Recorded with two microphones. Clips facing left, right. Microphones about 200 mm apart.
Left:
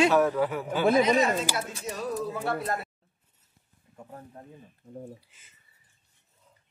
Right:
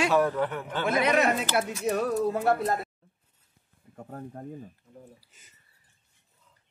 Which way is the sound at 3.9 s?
45° right (ahead or behind).